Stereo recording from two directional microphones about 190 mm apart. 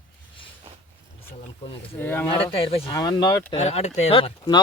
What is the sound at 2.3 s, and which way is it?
Speech, 30° left (ahead or behind).